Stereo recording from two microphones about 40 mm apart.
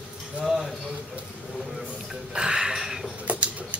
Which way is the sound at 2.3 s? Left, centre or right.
Centre.